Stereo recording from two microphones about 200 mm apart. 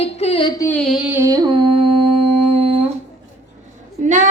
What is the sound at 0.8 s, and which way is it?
Music, centre (ahead or behind).